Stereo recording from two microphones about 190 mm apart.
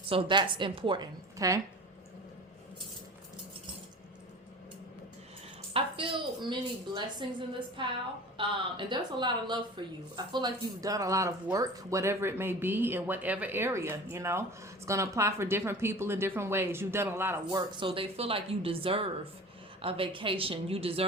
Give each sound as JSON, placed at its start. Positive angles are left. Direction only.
{"t": 0.1, "sound": "a woman's voice", "side_deg": -25}
{"t": 5.7, "sound": "a woman's voice", "side_deg": -25}
{"t": 17.7, "sound": "a woman's voice", "side_deg": -25}